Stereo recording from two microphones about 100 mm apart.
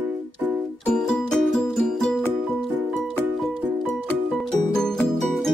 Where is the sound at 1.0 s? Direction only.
5° left (ahead or behind).